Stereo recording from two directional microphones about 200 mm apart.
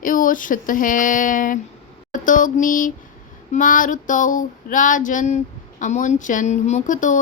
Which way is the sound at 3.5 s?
40° left (ahead or behind).